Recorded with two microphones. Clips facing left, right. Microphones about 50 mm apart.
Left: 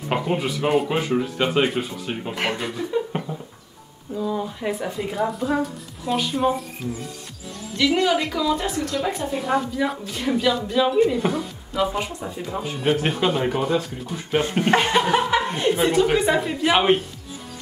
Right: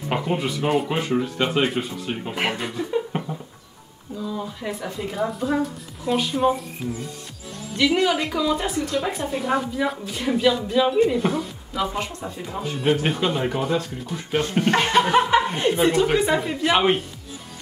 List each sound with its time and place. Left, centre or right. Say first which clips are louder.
0.1 s a woman's voice: left 1 dB; centre
2.9 s a sound: even; centre
4.4 s speech: left 3 dB; centre
4.9 s a woman's voice: left 1 dB; centre
15.7 s a woman's voice: left 1 dB; centre